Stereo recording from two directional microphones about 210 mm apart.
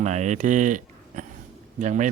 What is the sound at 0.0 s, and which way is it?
Speech, 35° right (ahead or behind).